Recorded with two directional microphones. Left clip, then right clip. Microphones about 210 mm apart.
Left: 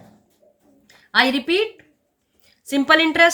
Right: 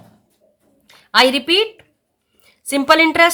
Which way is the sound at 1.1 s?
40° right (ahead or behind).